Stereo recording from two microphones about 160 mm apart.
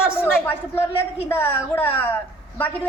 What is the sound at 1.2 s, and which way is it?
Speech, 15° left (ahead or behind).